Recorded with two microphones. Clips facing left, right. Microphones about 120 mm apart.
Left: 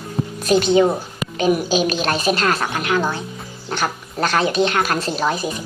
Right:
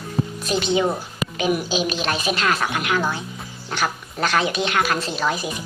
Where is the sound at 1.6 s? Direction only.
45° left (ahead or behind).